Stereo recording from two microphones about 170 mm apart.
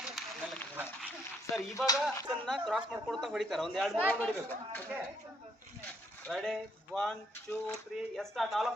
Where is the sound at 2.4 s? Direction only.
Centre (ahead or behind).